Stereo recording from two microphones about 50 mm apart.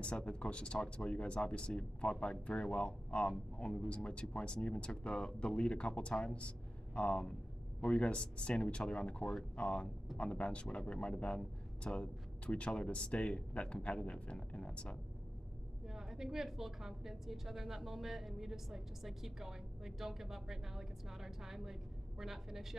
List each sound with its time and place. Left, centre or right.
0.0 s speech: left
15.9 s a woman's voice: centre